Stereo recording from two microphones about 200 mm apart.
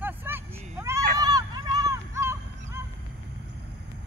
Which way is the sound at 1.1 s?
20° right (ahead or behind).